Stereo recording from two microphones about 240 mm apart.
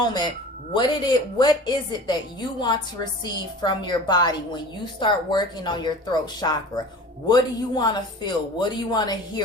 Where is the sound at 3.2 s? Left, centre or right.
Centre.